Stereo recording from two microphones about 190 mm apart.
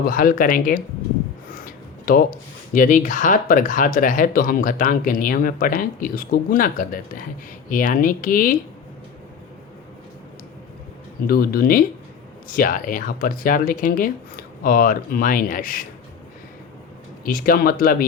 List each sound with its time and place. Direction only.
0.1 s speech: 50° left (ahead or behind)
11.3 s speech: 50° left (ahead or behind)
17.2 s speech: 50° left (ahead or behind)